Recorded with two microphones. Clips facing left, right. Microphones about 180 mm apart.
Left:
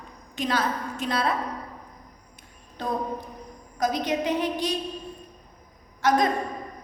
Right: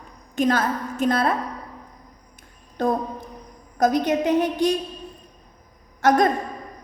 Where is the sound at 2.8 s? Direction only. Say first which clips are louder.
Right 6 dB; 50° right (ahead or behind).